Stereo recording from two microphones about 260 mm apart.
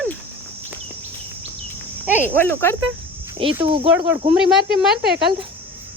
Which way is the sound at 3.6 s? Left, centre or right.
Centre.